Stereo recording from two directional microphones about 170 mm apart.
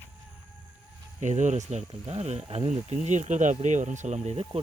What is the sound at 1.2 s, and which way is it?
Speech, 45° right (ahead or behind).